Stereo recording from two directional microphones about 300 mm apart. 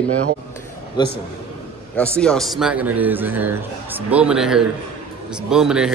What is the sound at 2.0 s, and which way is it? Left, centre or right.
A man's voice, centre.